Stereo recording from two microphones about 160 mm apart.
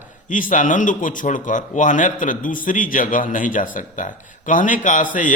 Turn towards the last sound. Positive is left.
turn(degrees=55)  # may be behind; listen again after turning